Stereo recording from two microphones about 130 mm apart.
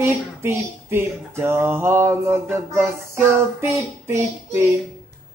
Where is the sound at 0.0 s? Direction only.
20° right (ahead or behind).